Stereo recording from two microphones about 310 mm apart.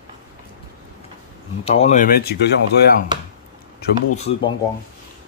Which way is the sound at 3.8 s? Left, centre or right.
Left.